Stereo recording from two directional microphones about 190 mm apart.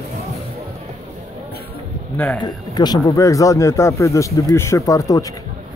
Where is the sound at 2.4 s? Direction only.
20° left (ahead or behind).